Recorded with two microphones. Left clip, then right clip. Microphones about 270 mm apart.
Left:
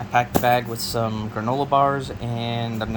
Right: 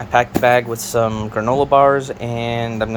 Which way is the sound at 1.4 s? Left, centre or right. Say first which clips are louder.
Right 7 dB; right.